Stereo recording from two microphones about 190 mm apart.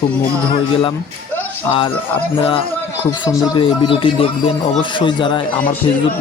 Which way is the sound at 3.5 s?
25° left (ahead or behind).